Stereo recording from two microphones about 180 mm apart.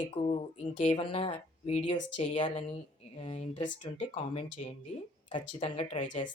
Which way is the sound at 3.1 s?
35° left (ahead or behind).